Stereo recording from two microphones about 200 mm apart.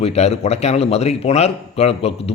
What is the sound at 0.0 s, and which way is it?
Speech, 35° left (ahead or behind).